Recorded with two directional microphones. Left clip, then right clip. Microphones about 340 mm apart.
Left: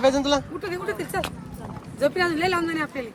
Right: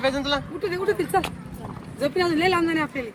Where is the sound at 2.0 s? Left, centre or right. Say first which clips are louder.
Even; centre.